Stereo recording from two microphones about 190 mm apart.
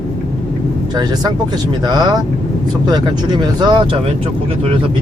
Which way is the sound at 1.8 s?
20° right (ahead or behind).